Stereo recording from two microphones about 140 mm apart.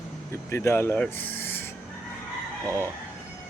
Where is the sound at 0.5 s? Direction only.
20° left (ahead or behind).